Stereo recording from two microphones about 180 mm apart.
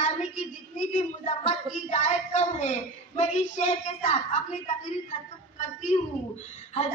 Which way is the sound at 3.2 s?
40° left (ahead or behind).